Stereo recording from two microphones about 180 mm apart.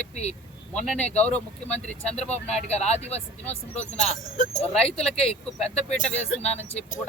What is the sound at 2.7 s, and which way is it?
Speech, 35° left (ahead or behind).